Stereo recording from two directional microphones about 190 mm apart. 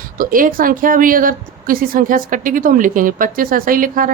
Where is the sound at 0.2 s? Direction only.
45° right (ahead or behind).